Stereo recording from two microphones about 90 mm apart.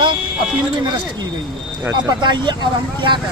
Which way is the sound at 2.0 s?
55° right (ahead or behind).